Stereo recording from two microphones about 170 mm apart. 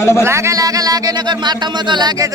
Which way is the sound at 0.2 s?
15° right (ahead or behind).